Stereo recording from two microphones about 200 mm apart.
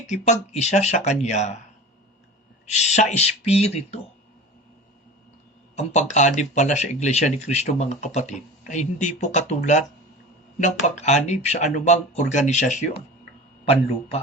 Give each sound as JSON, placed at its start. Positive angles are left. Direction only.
{"t": 0.1, "sound": "speech", "side_deg": 35}
{"t": 2.7, "sound": "speech", "side_deg": 35}
{"t": 5.7, "sound": "speech", "side_deg": 35}